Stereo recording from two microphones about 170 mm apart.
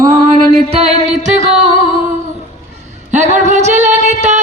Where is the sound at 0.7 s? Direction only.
35° right (ahead or behind).